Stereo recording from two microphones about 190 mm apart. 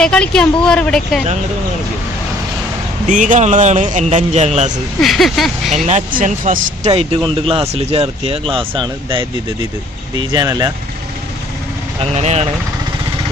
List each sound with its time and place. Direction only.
0.0 s a woman's voice: 5° left (ahead or behind)
3.1 s speech: 40° right (ahead or behind)
5.0 s a woman's voice: centre (ahead or behind)
5.9 s speech: 40° right (ahead or behind)
6.9 s speech: 25° right (ahead or behind)
10.3 s speech: 20° right (ahead or behind)
12.0 s speech: 35° right (ahead or behind)